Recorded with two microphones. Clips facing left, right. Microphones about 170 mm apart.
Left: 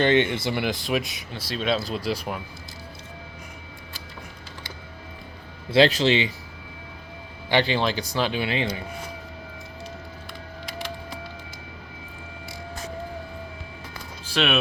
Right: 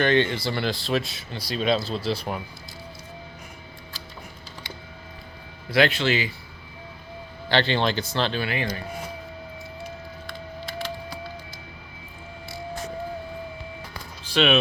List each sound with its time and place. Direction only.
0.0 s speech: 20° left (ahead or behind)
1.3 s speech: centre (ahead or behind)
5.7 s speech: 30° left (ahead or behind)
7.5 s speech: 10° left (ahead or behind)
14.3 s speech: 5° left (ahead or behind)